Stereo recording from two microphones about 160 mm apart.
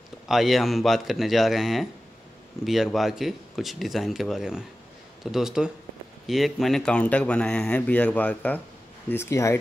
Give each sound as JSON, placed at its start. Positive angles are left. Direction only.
{"t": 0.3, "sound": "a man's voice", "side_deg": 0}